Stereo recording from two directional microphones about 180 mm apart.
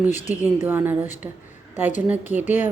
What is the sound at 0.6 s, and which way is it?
A woman's voice, 10° right (ahead or behind).